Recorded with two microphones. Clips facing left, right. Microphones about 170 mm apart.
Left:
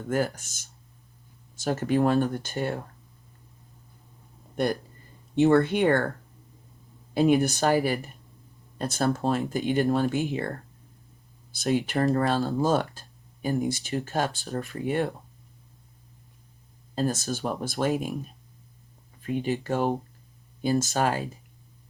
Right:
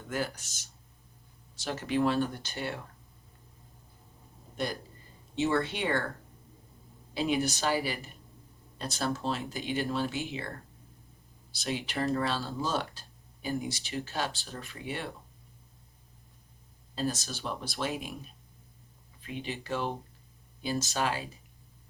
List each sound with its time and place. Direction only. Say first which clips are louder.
0.1 s speech: left 7 dB; 45° left (ahead or behind)
4.5 s speech: left 8 dB; 55° left (ahead or behind)
7.1 s speech: left 8 dB; 50° left (ahead or behind)
11.5 s speech: left 9 dB; 50° left (ahead or behind)
16.9 s speech: left 6 dB; 50° left (ahead or behind)